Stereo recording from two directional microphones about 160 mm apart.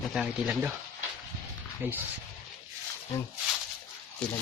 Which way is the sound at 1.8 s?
10° right (ahead or behind).